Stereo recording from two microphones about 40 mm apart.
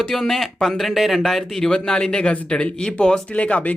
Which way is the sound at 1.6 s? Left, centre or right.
Centre.